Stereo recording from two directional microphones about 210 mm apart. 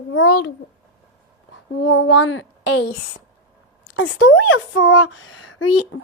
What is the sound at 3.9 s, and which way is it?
Speech, 70° left (ahead or behind).